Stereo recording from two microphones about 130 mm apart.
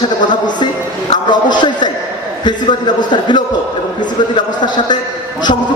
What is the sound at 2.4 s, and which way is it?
A man's voice, 35° left (ahead or behind).